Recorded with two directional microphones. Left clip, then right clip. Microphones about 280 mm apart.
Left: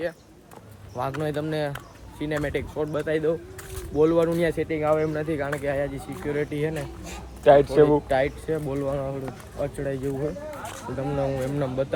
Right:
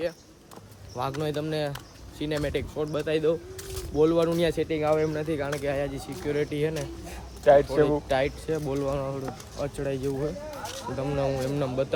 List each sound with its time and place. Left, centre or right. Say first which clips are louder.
0.9 s speech: left 2 dB; centre
7.1 s a sound: left 2 dB; left
7.7 s speech: left 5 dB; left
8.0 s speech: left 2 dB; centre